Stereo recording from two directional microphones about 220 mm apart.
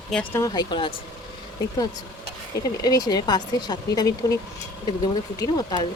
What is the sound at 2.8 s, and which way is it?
Speech, 15° left (ahead or behind).